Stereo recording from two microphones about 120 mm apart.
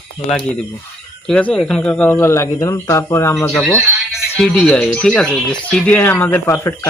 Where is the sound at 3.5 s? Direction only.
5° left (ahead or behind).